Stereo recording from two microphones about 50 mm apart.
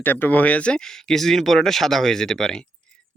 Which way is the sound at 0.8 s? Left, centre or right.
Centre.